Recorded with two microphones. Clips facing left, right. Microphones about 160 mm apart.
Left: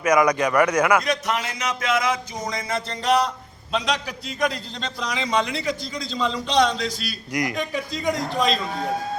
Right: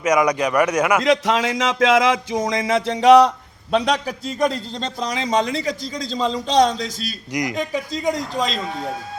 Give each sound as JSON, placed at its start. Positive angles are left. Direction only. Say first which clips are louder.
{"t": 0.0, "sound": "speech", "louder": "right 1 dB", "side_deg": -15}
{"t": 1.0, "sound": "speech", "louder": "right 7 dB", "side_deg": -90}
{"t": 3.7, "sound": "a man's voice", "louder": "right 6 dB", "side_deg": -55}
{"t": 4.4, "sound": "a man's voice", "louder": "right 3 dB", "side_deg": -40}
{"t": 7.3, "sound": "speech", "louder": "right 2 dB", "side_deg": -20}